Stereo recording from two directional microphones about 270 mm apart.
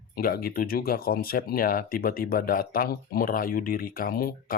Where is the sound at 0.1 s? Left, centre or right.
Left.